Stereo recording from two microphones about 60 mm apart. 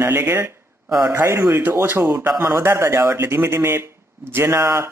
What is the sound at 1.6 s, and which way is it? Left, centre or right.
Speech, right.